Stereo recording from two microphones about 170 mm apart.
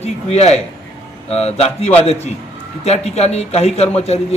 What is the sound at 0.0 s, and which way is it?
A man's voice, 40° left (ahead or behind).